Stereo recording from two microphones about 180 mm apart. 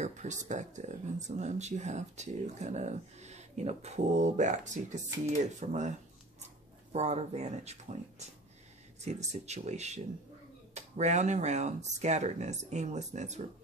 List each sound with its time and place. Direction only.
0.0 s speech: 40° right (ahead or behind)